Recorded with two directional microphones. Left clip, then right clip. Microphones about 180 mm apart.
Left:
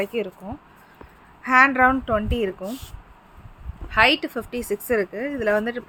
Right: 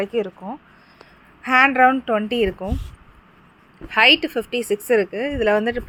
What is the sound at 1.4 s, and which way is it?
Speech, 20° right (ahead or behind).